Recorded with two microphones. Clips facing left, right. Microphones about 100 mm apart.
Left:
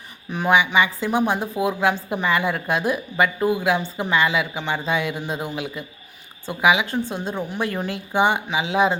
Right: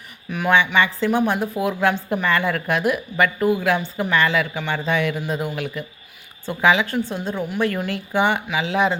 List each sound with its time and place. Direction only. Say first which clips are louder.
0.3 s a woman's voice: even; 25° left (ahead or behind)
0.5 s a woman's voice: even; 15° left (ahead or behind)